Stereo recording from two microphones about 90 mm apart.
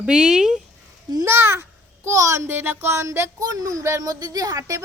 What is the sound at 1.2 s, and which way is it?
A child's voice, 30° right (ahead or behind).